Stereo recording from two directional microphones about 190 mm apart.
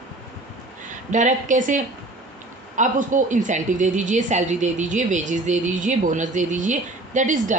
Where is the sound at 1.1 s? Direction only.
40° right (ahead or behind).